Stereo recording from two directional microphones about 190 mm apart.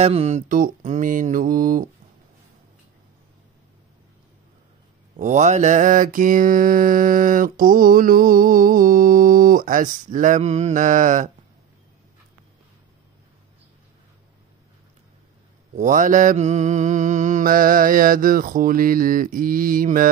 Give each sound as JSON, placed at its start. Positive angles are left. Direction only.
{"t": 0.0, "sound": "mantra", "side_deg": -35}
{"t": 5.1, "sound": "mantra", "side_deg": -40}
{"t": 15.7, "sound": "mantra", "side_deg": -40}